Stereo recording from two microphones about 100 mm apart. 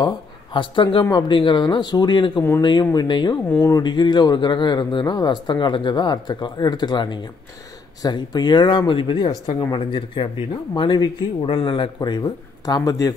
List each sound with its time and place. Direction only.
0.0 s speech: 55° left (ahead or behind)
3.4 s speech: 20° left (ahead or behind)
3.7 s speech: 50° left (ahead or behind)
10.7 s speech: 45° left (ahead or behind)
11.4 s speech: 60° left (ahead or behind)
12.0 s speech: 45° left (ahead or behind)